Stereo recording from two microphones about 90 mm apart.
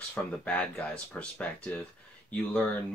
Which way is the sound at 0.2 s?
20° left (ahead or behind).